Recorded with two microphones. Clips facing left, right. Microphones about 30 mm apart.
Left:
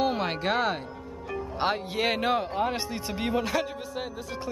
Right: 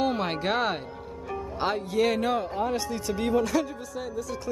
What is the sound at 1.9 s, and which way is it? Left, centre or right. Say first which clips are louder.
Speech: right 2 dB; left.